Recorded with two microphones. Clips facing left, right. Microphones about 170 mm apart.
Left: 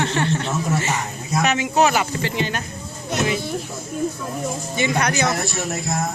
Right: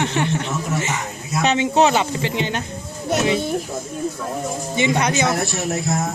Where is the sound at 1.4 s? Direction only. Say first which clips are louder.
Right 2 dB; 30° right (ahead or behind).